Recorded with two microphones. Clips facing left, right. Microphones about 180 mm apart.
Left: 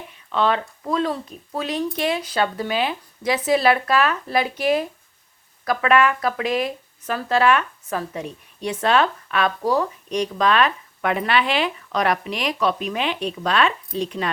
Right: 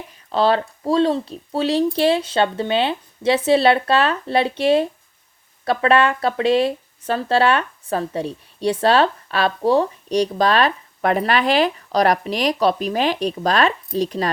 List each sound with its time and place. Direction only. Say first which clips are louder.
0.3 s speech: right 4 dB; 35° right (ahead or behind)